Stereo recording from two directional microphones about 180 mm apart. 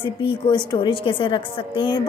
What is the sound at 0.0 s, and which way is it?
A woman's voice, 30° left (ahead or behind).